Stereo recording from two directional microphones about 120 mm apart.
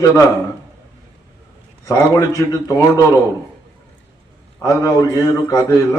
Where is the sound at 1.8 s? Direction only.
25° left (ahead or behind).